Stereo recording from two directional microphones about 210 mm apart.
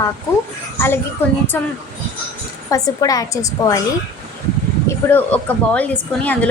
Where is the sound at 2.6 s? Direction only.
15° left (ahead or behind).